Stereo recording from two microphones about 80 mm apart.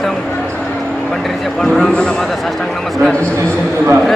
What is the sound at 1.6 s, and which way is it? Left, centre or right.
Speech, centre.